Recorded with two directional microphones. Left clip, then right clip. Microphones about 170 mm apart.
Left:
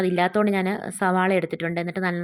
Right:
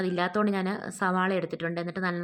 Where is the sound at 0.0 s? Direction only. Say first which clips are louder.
Left 6 dB; 20° left (ahead or behind).